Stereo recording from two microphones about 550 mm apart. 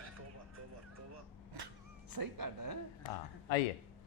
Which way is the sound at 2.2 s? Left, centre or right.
Right.